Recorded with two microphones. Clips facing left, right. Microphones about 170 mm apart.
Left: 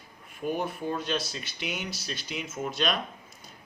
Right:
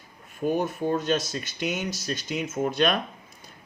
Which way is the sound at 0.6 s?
45° right (ahead or behind).